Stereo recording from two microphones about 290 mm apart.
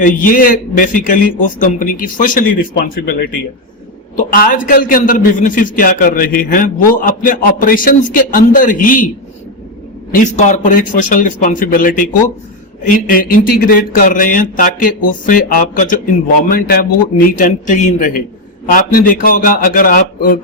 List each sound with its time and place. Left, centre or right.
0.0 s speech: left
10.2 s speech: left